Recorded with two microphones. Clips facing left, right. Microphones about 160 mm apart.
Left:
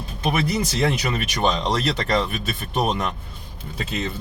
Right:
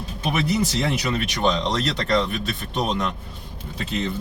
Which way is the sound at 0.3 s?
Centre (ahead or behind).